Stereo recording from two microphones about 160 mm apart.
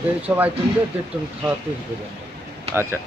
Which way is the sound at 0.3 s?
10° right (ahead or behind).